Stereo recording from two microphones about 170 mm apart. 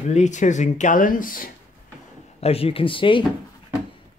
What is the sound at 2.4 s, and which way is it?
Speech, 35° left (ahead or behind).